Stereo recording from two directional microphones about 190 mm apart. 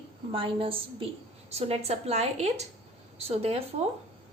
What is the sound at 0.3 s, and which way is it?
A woman's voice, 30° right (ahead or behind).